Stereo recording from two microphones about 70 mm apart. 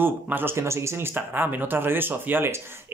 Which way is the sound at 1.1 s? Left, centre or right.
Right.